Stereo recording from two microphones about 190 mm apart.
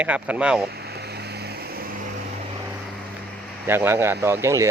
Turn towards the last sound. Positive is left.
turn(degrees=-15)  # may be behind; listen again after turning